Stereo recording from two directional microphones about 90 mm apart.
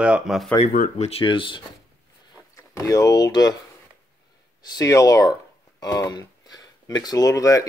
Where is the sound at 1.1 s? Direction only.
70° left (ahead or behind).